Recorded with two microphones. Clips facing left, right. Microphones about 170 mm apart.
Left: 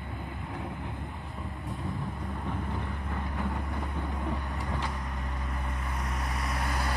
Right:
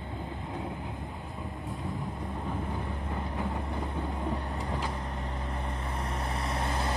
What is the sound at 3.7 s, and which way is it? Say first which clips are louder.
Vehicle: right 1 dB; 30° right (ahead or behind).